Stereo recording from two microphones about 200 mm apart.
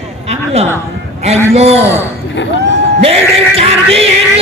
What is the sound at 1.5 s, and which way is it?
Speech, 30° right (ahead or behind).